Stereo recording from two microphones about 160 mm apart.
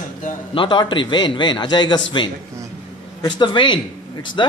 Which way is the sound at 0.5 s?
30° left (ahead or behind).